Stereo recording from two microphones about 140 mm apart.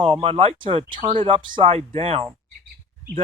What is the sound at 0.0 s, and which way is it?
Speech, 40° right (ahead or behind).